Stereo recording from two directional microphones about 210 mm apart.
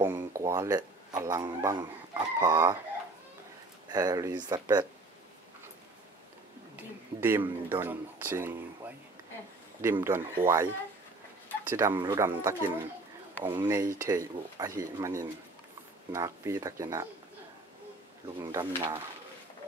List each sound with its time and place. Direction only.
0.0 s speech: 10° right (ahead or behind)
3.9 s speech: 15° right (ahead or behind)
6.8 s speech: 10° right (ahead or behind)
18.4 s speech: 20° right (ahead or behind)